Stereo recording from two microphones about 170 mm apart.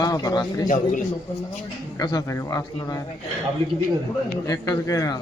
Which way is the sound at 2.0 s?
20° left (ahead or behind).